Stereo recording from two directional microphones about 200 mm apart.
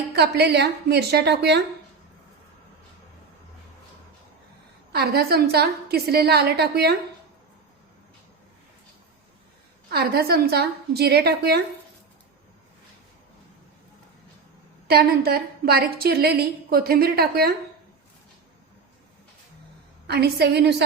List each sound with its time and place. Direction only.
0.2 s a woman's voice: 55° right (ahead or behind)
4.9 s a woman's voice: 50° right (ahead or behind)
9.9 s a woman's voice: 50° right (ahead or behind)
14.8 s a woman's voice: 50° right (ahead or behind)
20.1 s a woman's voice: 55° right (ahead or behind)